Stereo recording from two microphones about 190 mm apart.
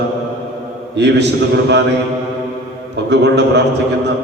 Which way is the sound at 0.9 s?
65° right (ahead or behind).